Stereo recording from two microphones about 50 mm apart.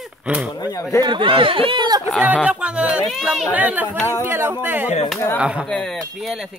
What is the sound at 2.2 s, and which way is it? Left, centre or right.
Speech, right.